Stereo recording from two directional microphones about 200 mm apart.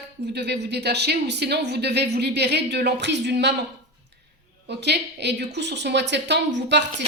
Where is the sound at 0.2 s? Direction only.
55° right (ahead or behind).